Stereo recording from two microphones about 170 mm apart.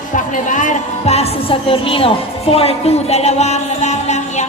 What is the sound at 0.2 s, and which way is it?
Music, 50° left (ahead or behind).